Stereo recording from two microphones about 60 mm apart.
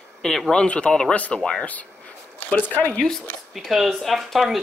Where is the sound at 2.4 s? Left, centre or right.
Left.